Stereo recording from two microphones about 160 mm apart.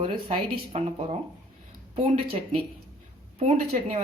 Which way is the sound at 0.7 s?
45° right (ahead or behind).